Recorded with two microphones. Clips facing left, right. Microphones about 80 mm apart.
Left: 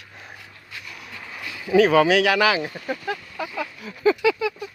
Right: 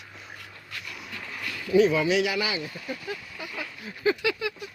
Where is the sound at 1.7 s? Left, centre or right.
Left.